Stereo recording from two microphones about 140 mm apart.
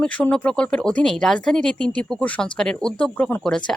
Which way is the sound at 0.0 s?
10° left (ahead or behind).